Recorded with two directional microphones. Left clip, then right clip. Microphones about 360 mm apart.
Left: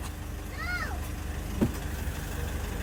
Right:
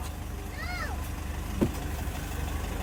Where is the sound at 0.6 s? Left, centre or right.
Centre.